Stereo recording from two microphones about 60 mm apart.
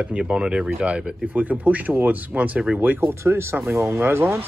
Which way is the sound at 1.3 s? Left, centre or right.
Right.